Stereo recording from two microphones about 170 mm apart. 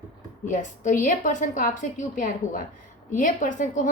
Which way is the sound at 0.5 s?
50° left (ahead or behind).